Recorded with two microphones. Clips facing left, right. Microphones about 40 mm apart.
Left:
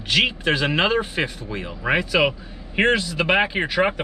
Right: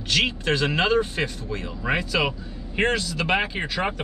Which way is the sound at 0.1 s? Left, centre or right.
Centre.